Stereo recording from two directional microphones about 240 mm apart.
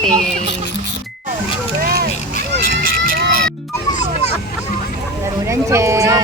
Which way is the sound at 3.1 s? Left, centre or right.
Right.